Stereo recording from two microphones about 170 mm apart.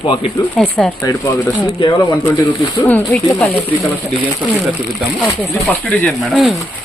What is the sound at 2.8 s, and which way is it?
Speech, 10° left (ahead or behind).